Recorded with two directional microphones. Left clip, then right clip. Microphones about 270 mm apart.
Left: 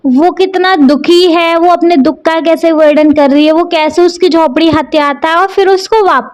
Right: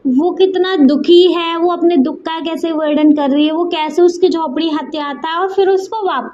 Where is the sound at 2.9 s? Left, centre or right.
Left.